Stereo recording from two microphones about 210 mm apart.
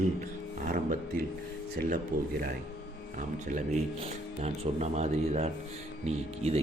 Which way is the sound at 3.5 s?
35° right (ahead or behind).